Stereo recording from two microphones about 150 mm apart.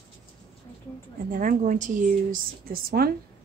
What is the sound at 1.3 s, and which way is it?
Speech, 65° right (ahead or behind).